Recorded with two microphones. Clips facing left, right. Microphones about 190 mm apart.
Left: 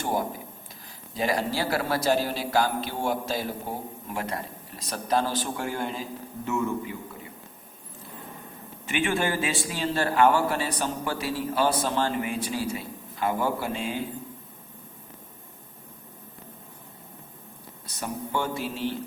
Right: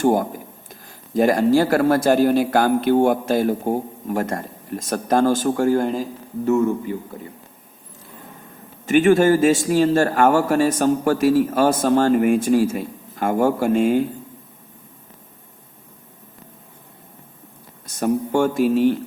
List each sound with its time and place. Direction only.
0.0 s a man's voice: 50° right (ahead or behind)
8.9 s a man's voice: 45° right (ahead or behind)
17.8 s a man's voice: 45° right (ahead or behind)